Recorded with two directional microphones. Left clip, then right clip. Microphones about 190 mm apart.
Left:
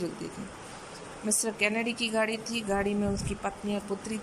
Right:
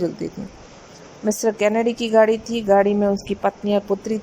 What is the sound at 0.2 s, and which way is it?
Speech, 40° right (ahead or behind).